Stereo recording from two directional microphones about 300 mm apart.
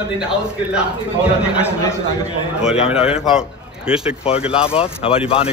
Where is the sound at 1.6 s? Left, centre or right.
Centre.